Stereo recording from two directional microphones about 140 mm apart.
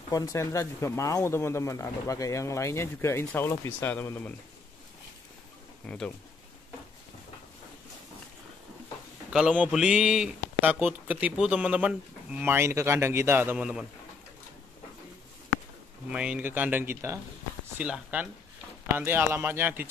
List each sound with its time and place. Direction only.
0.1 s speech: 25° left (ahead or behind)
5.9 s speech: 10° left (ahead or behind)
9.3 s speech: 5° right (ahead or behind)
16.1 s speech: 10° right (ahead or behind)